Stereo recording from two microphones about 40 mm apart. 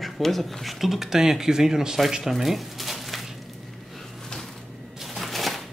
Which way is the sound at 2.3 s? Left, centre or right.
Centre.